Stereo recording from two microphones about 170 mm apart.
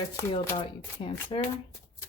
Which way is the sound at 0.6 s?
30° left (ahead or behind).